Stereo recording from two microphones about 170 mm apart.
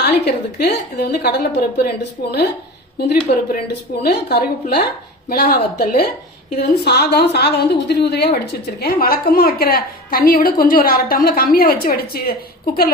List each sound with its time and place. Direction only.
0.0 s a woman's voice: 75° left (ahead or behind)
3.0 s a woman's voice: 70° left (ahead or behind)
5.3 s a woman's voice: 60° left (ahead or behind)